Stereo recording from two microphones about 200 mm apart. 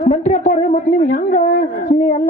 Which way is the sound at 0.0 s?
35° left (ahead or behind).